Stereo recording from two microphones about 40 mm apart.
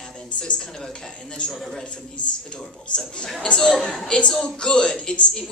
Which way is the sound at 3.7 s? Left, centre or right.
Centre.